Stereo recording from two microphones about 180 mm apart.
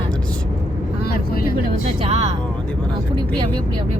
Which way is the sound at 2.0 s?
35° right (ahead or behind).